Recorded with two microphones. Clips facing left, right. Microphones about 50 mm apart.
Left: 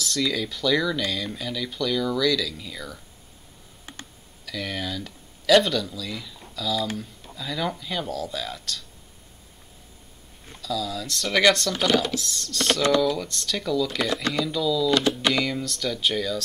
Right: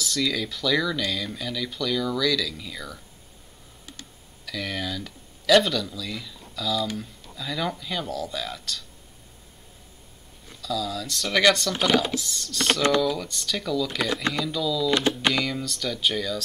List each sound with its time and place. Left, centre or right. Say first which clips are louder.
0.0 s speech: left 1 dB; centre
4.5 s speech: even; centre
10.6 s speech: even; centre
11.9 s speech: even; centre
12.2 s speech: left 1 dB; centre
14.9 s speech: left 1 dB; right
15.3 s speech: left 1 dB; centre